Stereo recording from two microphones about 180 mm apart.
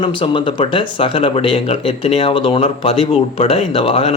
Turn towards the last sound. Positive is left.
turn(degrees=30)  # may be behind; listen again after turning